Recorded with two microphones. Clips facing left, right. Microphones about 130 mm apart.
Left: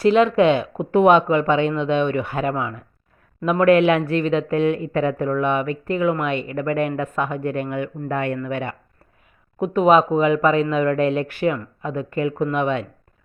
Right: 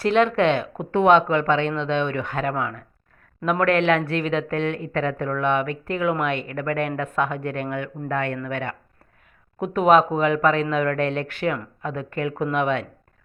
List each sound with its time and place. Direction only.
0.0 s speech: centre (ahead or behind)